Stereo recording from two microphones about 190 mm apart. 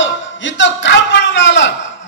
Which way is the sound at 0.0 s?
75° left (ahead or behind).